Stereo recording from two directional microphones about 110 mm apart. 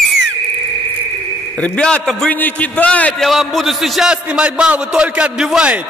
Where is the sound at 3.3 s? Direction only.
Centre (ahead or behind).